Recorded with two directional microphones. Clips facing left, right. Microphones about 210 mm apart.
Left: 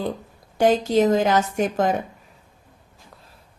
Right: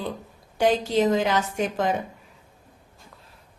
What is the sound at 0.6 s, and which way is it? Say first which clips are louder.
A woman's voice: left 3 dB; 45° left (ahead or behind).